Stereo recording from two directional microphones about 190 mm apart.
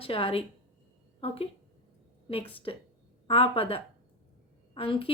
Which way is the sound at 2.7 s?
30° left (ahead or behind).